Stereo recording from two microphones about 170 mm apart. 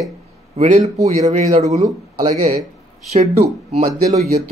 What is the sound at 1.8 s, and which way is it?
Speech, 25° right (ahead or behind).